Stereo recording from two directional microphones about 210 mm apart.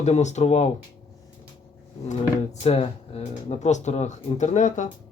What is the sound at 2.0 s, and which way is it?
Speech, 30° left (ahead or behind).